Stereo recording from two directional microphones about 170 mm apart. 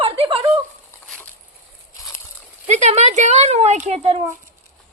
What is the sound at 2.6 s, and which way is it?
Speech, 40° right (ahead or behind).